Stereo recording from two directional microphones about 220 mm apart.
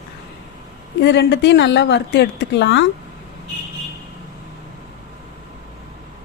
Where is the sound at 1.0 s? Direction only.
50° left (ahead or behind).